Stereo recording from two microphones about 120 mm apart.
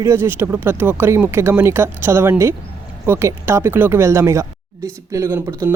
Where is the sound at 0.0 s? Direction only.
20° right (ahead or behind).